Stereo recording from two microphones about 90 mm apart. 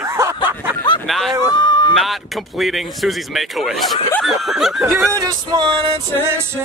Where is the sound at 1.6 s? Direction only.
60° left (ahead or behind).